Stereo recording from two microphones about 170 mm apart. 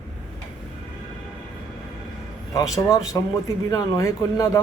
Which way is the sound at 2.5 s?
20° left (ahead or behind).